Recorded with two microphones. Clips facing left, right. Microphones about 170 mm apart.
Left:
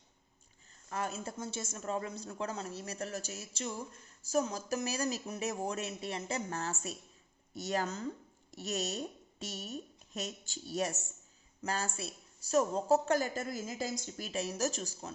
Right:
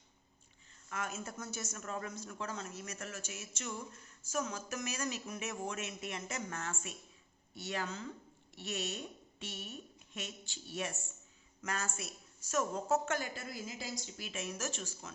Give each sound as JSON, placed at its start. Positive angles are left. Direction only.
{"t": 0.9, "sound": "a woman's voice", "side_deg": 35}